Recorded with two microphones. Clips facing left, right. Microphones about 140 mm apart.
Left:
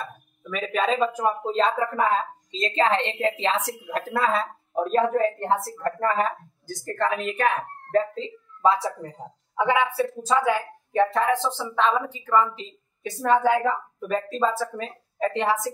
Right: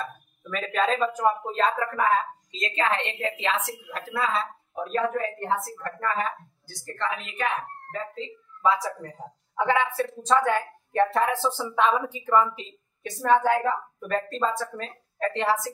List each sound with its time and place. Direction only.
0.0 s speech: 5° left (ahead or behind); by 4.9 s 45° left (ahead or behind)
4.9 s a woman's voice: 30° left (ahead or behind)
8.6 s speech: 30° left (ahead or behind)
9.6 s speech: 15° left (ahead or behind); by 12.6 s 10° right (ahead or behind)
13.2 s a woman's voice: 10° left (ahead or behind)